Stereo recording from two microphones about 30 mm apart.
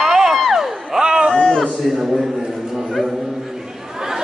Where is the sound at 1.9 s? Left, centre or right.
Centre.